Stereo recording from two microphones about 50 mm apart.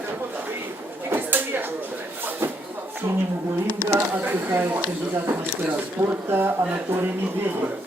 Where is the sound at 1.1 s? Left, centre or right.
Right.